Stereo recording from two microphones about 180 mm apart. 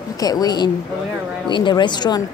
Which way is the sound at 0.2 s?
20° left (ahead or behind).